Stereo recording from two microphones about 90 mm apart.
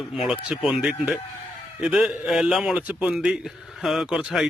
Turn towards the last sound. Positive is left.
turn(degrees=-5)  # may be behind; listen again after turning